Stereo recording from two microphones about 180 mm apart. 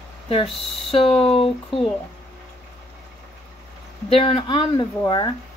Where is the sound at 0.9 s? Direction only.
35° left (ahead or behind).